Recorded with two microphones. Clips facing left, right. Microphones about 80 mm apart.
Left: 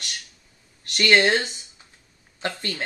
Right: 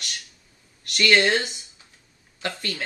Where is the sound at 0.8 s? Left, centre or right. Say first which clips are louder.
Left 1 dB; left.